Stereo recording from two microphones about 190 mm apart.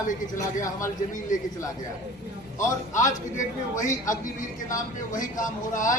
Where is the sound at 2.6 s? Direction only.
15° left (ahead or behind).